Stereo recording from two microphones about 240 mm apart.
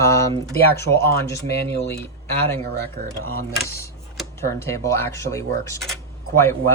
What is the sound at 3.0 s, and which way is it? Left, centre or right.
Speech, right.